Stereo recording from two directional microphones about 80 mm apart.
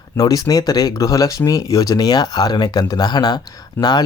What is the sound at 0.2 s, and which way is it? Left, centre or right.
Speech, left.